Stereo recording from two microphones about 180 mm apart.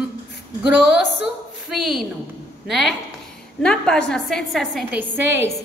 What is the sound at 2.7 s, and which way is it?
A woman's voice, centre (ahead or behind).